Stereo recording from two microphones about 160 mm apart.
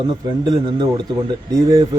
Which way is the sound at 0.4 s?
25° right (ahead or behind).